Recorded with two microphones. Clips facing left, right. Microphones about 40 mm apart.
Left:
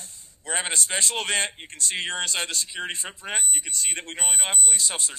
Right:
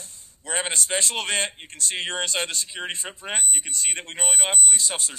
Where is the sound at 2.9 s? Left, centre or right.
Right.